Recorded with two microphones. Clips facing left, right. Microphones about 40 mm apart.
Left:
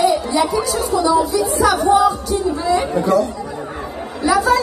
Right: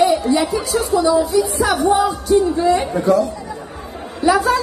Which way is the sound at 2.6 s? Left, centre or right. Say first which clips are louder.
Right 1 dB; right.